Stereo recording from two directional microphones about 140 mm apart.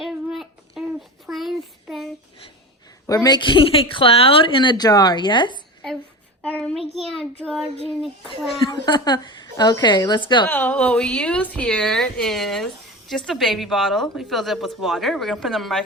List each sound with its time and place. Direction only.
0.0 s child singing: centre (ahead or behind)
3.1 s speech: 25° left (ahead or behind)
6.4 s child singing: 10° left (ahead or behind)
8.0 s a woman's voice: centre (ahead or behind)
8.7 s speech: 30° left (ahead or behind)
10.5 s a woman's voice: 10° left (ahead or behind)